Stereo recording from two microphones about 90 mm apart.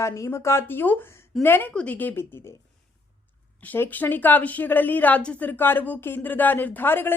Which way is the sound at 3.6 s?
20° left (ahead or behind).